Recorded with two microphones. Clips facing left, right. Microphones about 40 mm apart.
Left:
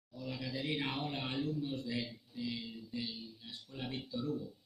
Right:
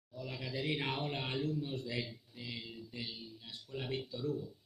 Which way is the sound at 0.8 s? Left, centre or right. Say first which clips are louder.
Right 1 dB; right.